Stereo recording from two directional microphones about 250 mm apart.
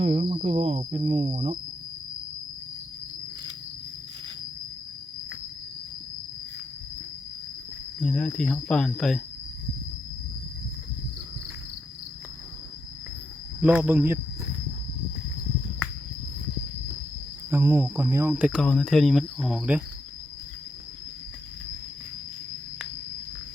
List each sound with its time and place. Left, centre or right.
0.0 s cricket: right
8.0 s speech: centre
13.6 s speech: centre
17.5 s speech: centre